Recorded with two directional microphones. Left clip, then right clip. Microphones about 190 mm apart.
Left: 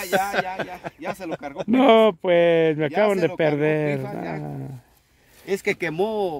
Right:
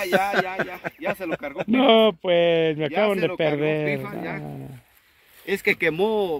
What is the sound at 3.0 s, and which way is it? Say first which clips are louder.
Speech: left 1 dB; 70° left (ahead or behind).